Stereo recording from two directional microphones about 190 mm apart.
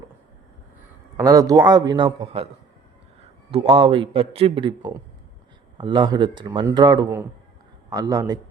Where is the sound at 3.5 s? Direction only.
30° right (ahead or behind).